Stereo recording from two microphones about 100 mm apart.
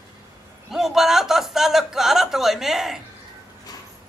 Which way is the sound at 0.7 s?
5° right (ahead or behind).